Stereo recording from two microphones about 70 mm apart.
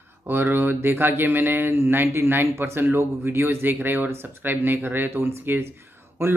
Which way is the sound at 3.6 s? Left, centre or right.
Right.